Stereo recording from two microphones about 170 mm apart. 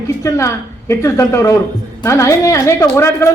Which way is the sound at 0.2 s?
15° left (ahead or behind).